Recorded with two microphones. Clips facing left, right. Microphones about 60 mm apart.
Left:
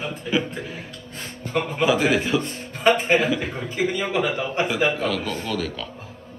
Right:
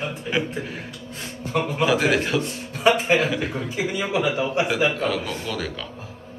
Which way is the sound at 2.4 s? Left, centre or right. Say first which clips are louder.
Even; left.